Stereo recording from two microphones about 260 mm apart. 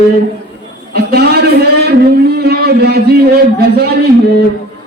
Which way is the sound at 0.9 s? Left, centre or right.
Right.